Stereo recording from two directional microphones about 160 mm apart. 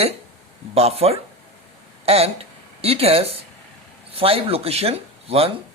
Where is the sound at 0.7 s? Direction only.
40° right (ahead or behind).